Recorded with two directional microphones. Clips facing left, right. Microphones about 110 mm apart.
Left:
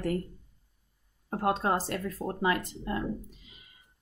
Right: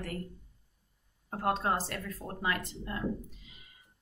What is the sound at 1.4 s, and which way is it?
Speech, 15° left (ahead or behind).